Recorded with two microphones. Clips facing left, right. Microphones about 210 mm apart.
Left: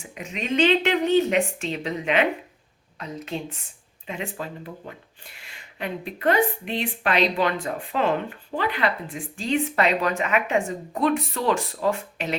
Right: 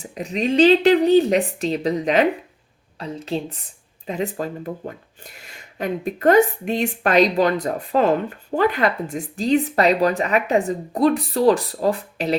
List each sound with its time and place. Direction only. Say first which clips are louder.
0.0 s speech: right 9 dB; 35° right (ahead or behind)